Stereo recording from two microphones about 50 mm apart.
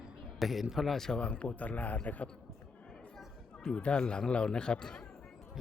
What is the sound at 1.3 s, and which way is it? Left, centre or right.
A man's voice, left.